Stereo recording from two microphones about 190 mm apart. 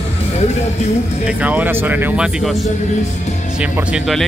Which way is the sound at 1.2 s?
5° right (ahead or behind).